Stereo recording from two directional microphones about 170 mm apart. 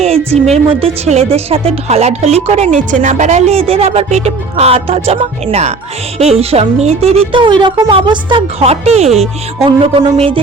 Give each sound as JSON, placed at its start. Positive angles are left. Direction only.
{"t": 0.0, "sound": "speech", "side_deg": -35}